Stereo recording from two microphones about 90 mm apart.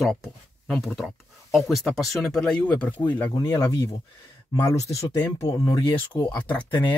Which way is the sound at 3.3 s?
35° left (ahead or behind).